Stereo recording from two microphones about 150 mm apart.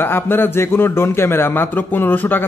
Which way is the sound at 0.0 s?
15° left (ahead or behind).